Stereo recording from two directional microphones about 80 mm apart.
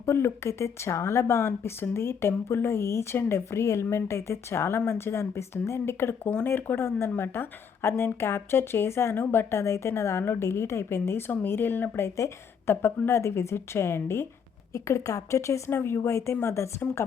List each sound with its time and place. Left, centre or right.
0.0 s speech: left